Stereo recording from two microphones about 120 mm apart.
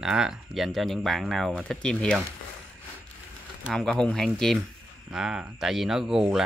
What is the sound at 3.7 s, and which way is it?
Speech, 5° left (ahead or behind).